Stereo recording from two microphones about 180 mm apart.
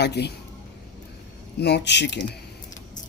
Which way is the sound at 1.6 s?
65° left (ahead or behind).